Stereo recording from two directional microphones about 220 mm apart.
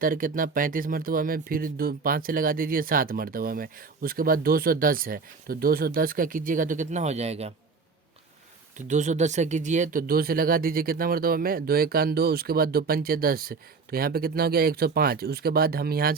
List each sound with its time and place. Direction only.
0.0 s speech: 40° right (ahead or behind)
8.9 s speech: 35° right (ahead or behind)